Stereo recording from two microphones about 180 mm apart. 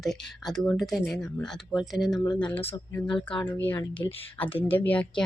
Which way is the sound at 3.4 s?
10° left (ahead or behind).